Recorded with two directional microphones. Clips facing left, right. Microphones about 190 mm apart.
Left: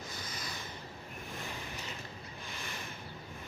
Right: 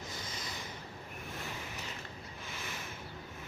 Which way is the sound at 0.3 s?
25° right (ahead or behind).